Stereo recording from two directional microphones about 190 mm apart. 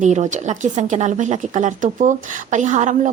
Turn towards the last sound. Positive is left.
turn(degrees=-40)  # may be behind; listen again after turning